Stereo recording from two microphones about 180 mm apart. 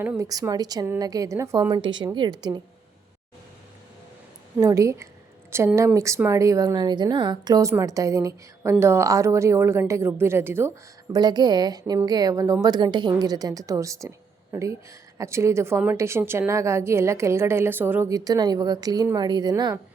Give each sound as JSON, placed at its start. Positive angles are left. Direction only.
{"t": 0.0, "sound": "a woman's voice", "side_deg": -15}
{"t": 4.5, "sound": "a woman's voice", "side_deg": -15}